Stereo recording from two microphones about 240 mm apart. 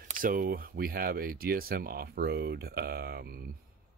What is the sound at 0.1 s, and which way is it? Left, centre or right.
Speech, right.